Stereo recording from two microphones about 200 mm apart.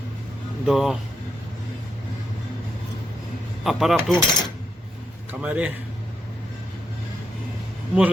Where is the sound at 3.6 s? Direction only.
Centre (ahead or behind).